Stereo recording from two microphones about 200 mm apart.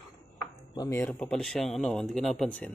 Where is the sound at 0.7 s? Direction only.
15° left (ahead or behind).